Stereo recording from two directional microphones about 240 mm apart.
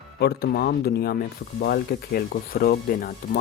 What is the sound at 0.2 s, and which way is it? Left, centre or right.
Speech, left.